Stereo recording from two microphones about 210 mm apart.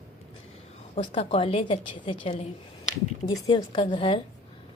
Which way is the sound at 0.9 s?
30° left (ahead or behind).